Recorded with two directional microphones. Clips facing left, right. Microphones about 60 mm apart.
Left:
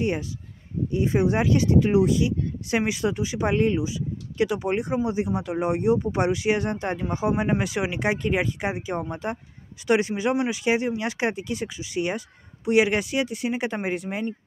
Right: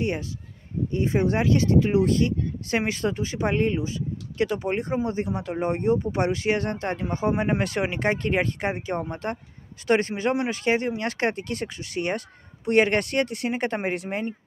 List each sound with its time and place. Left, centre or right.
0.0 s speech: centre
11.3 s speech: right
11.6 s speech: centre